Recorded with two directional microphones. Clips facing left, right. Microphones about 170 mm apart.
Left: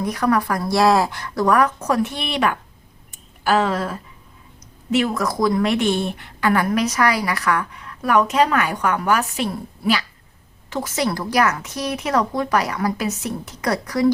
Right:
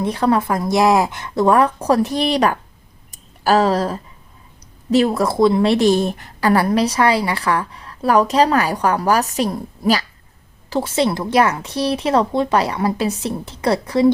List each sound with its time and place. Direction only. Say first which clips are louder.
0.0 s a woman's voice: right 2 dB; 25° right (ahead or behind)
3.1 s a sound: right 3 dB; 40° right (ahead or behind)
4.9 s a woman's voice: right 4 dB; 35° right (ahead or behind)
10.7 s a woman's voice: right 5 dB; 30° right (ahead or behind)